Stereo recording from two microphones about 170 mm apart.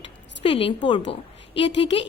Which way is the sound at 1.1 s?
30° left (ahead or behind).